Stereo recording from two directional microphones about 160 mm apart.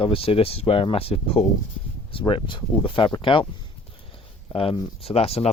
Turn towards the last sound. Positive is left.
turn(degrees=40)  # may be behind; listen again after turning